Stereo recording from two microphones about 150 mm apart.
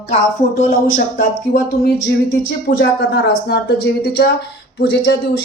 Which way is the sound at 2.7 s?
90° left.